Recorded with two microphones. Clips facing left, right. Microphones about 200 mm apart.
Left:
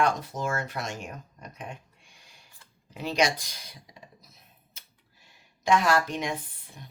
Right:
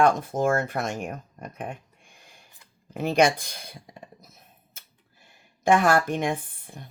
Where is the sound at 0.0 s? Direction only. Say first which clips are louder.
Right 6 dB; 50° right (ahead or behind).